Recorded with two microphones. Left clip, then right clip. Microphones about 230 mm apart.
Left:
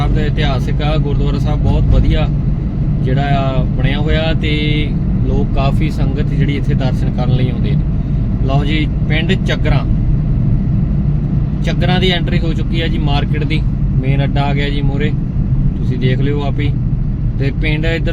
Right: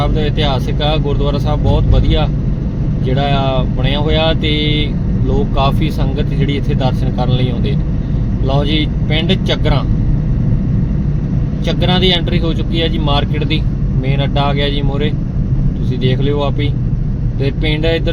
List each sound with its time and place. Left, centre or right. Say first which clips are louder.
0.2 s speech: right 2 dB; centre
3.1 s speech: right 2 dB; centre
8.5 s speech: right 2 dB; centre
11.8 s speech: right 2 dB; centre